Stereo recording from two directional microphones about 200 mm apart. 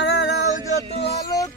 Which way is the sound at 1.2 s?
20° left (ahead or behind).